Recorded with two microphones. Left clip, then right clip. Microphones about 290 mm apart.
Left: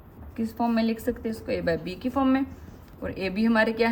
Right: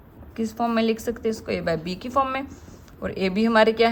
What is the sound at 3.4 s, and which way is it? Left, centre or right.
Speech, right.